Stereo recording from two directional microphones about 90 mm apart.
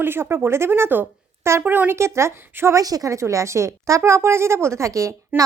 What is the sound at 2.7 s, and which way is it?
A woman's voice, 45° right (ahead or behind).